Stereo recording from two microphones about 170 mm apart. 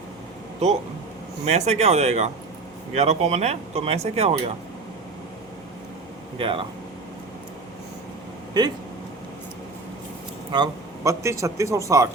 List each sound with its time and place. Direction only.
1.5 s speech: 40° right (ahead or behind)
6.3 s speech: 30° right (ahead or behind)
8.6 s speech: 25° right (ahead or behind)
10.5 s a man's voice: 20° right (ahead or behind)